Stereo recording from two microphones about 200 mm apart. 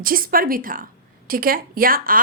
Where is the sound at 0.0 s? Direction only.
45° right (ahead or behind).